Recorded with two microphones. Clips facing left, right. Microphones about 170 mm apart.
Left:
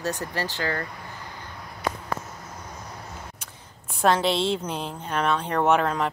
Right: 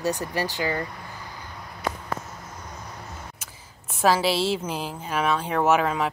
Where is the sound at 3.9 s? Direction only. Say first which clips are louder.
Even; 5° right (ahead or behind).